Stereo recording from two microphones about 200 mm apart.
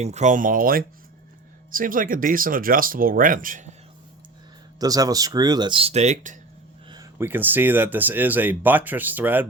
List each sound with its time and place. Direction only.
0.0 s speech: 35° right (ahead or behind)
4.8 s speech: 20° right (ahead or behind); by 6.3 s 35° right (ahead or behind)
6.9 s speech: 15° right (ahead or behind)